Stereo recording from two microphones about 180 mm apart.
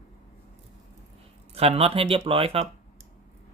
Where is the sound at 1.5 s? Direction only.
35° right (ahead or behind).